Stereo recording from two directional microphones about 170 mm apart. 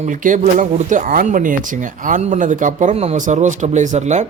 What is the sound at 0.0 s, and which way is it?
A man's voice, 50° right (ahead or behind).